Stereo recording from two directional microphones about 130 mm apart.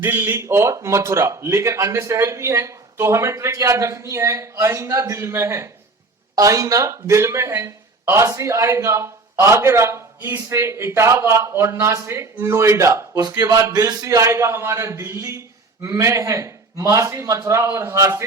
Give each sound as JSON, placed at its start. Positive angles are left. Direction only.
{"t": 0.0, "sound": "speech", "side_deg": -15}